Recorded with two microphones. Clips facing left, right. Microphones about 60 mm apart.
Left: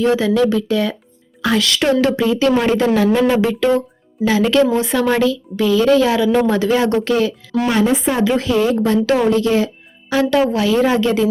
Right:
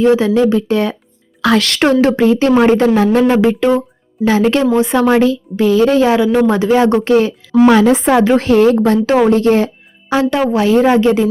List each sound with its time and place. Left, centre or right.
0.0 s a woman's voice: right
1.4 s speech: right
2.0 s a woman's voice: right
3.4 s speech: right
4.3 s a woman's voice: right
7.6 s speech: right
10.1 s a woman's voice: right